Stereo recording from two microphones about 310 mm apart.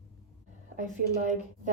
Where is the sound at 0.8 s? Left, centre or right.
Right.